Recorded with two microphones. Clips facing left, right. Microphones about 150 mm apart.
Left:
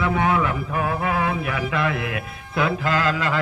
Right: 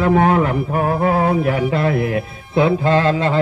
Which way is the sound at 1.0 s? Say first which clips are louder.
Right 7 dB; 35° right (ahead or behind).